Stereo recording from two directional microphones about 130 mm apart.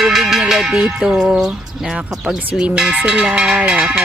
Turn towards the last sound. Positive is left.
turn(degrees=-5)  # may be behind; listen again after turning